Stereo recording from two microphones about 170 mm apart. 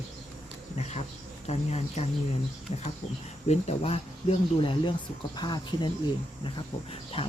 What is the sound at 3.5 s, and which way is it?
Speech, 35° left (ahead or behind).